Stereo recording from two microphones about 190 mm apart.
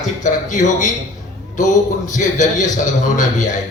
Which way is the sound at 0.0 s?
40° left (ahead or behind).